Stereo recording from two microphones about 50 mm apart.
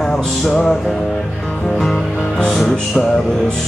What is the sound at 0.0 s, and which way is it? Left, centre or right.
Music, centre.